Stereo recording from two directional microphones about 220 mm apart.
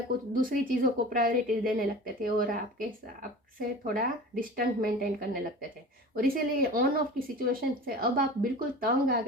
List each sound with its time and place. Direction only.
0.3 s a woman's voice: 40° right (ahead or behind)